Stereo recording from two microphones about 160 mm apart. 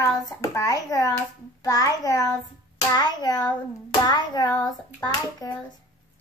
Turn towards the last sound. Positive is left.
turn(degrees=25)  # may be behind; listen again after turning